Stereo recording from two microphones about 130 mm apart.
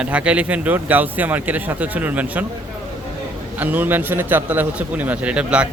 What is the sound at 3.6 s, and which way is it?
A man's voice, 15° right (ahead or behind).